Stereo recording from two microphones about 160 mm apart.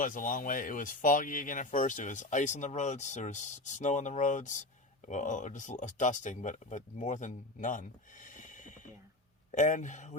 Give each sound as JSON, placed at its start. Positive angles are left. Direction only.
{"t": 0.0, "sound": "speech", "side_deg": 60}